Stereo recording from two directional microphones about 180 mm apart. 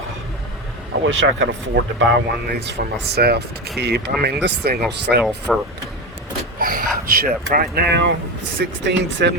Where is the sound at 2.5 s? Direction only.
70° right (ahead or behind).